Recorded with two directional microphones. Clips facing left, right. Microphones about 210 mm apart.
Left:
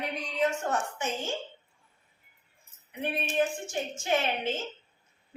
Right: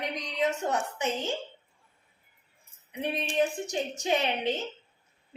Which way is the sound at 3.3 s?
20° right (ahead or behind).